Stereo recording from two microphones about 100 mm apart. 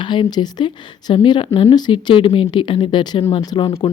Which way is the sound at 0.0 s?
50° left (ahead or behind).